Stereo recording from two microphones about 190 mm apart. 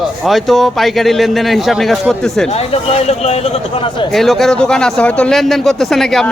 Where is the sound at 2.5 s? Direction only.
30° left (ahead or behind).